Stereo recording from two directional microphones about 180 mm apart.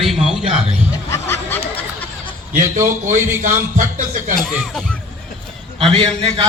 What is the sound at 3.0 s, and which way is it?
Speech, 45° right (ahead or behind).